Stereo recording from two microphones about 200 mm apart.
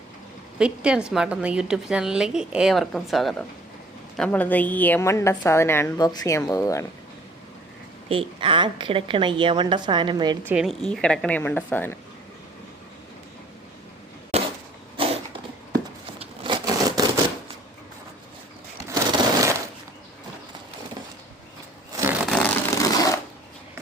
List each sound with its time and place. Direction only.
0.6 s a woman's voice: 5° right (ahead or behind); by 6.8 s 15° left (ahead or behind)
8.1 s a woman's voice: 25° right (ahead or behind)
10.4 s a woman's voice: 5° right (ahead or behind)
15.0 s a sound: 25° right (ahead or behind)
18.9 s sewing machine: 15° right (ahead or behind)
21.9 s shuffling cards: 10° right (ahead or behind)
22.8 s a sound: 15° left (ahead or behind)